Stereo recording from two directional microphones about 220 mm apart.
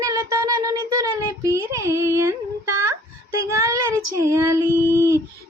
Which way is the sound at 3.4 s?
15° right (ahead or behind).